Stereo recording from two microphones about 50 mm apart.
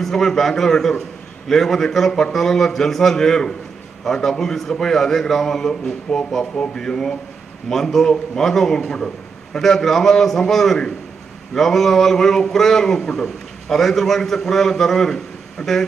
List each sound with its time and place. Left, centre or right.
0.0 s a man's voice: centre